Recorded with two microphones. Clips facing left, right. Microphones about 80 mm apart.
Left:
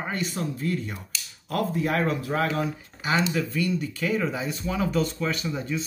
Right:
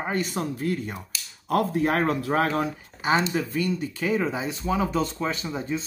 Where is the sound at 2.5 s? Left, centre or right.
Right.